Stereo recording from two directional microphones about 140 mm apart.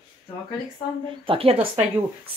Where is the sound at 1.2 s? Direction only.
40° right (ahead or behind).